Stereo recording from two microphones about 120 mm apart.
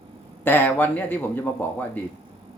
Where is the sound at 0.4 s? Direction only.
15° left (ahead or behind).